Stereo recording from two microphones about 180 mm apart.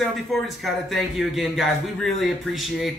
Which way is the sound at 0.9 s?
Centre (ahead or behind).